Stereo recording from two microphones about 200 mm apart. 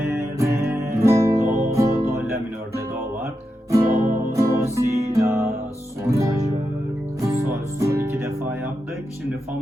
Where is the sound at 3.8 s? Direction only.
45° right (ahead or behind).